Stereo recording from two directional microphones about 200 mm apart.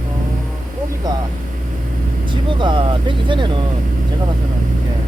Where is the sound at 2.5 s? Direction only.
25° right (ahead or behind).